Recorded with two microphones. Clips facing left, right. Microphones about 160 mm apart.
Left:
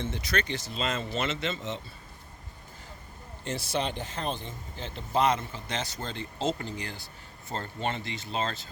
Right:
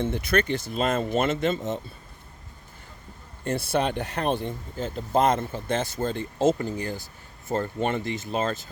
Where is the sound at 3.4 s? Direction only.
55° right (ahead or behind).